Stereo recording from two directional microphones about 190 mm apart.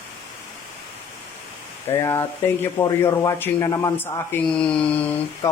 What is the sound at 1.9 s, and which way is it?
Speech, 15° left (ahead or behind).